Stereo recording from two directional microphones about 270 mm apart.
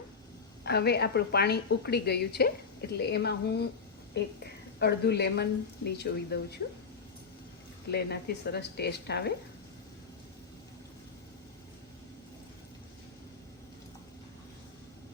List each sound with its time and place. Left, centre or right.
0.6 s a woman's voice: left
7.9 s a woman's voice: left